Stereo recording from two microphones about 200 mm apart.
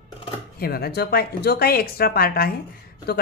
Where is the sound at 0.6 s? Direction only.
50° left (ahead or behind).